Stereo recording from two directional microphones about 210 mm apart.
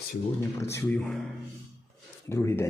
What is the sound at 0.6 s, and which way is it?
Speech, 10° left (ahead or behind).